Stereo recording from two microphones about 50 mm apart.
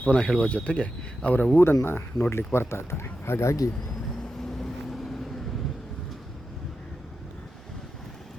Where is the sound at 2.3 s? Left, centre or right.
Left.